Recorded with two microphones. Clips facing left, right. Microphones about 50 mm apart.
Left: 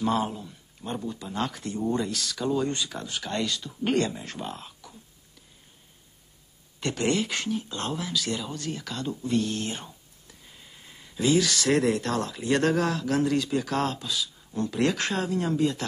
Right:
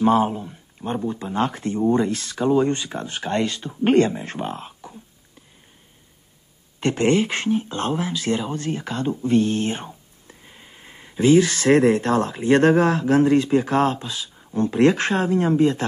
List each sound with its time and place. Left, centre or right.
0.0 s speech: right
6.8 s speech: right